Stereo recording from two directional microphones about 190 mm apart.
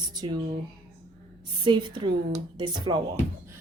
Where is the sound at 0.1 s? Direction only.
20° right (ahead or behind).